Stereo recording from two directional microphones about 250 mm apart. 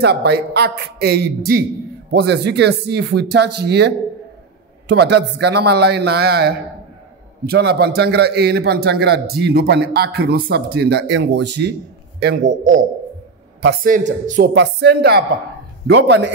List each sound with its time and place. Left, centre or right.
0.0 s a man's voice: right
13.8 s a man's voice: right
14.5 s a man's voice: right